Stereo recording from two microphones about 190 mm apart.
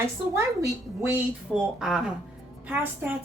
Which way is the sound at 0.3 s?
15° right (ahead or behind).